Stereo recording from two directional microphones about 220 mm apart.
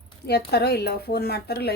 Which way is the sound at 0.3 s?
45° left (ahead or behind).